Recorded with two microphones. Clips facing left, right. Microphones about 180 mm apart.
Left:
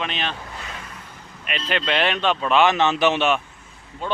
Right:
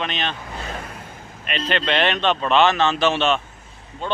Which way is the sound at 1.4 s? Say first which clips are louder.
Right 2 dB; 5° left (ahead or behind).